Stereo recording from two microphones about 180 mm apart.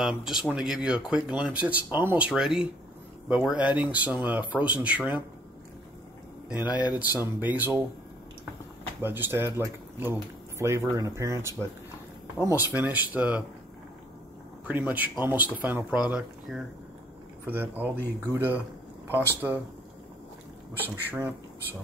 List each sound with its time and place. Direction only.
0.0 s speech: 5° right (ahead or behind)
6.5 s speech: 10° right (ahead or behind)
9.0 s speech: 10° right (ahead or behind)
14.7 s speech: 10° right (ahead or behind)
20.9 s speech: 10° right (ahead or behind)